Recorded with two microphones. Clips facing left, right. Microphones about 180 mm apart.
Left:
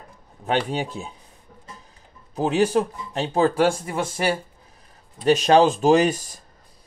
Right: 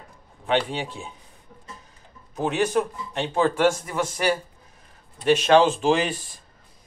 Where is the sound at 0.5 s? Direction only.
40° left (ahead or behind).